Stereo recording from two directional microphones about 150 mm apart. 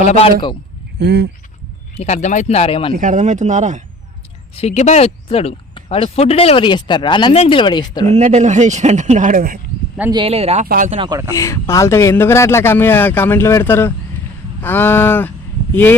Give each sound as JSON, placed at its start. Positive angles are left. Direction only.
{"t": 0.0, "sound": "speech", "side_deg": 45}
{"t": 2.0, "sound": "speech", "side_deg": 50}
{"t": 2.9, "sound": "speech", "side_deg": -60}
{"t": 4.5, "sound": "speech", "side_deg": 45}
{"t": 8.1, "sound": "a man's voice", "side_deg": -50}
{"t": 10.2, "sound": "a man's voice", "side_deg": -45}
{"t": 11.0, "sound": "speech", "side_deg": -25}
{"t": 11.3, "sound": "a man's voice", "side_deg": 20}